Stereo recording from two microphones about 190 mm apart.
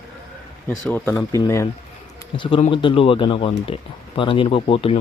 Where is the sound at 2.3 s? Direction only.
25° left (ahead or behind).